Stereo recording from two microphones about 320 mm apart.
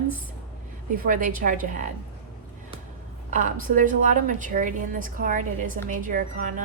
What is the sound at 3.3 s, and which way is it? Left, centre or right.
A woman's voice, right.